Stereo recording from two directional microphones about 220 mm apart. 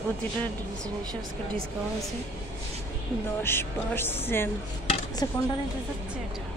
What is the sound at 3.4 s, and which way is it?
Music, 10° left (ahead or behind).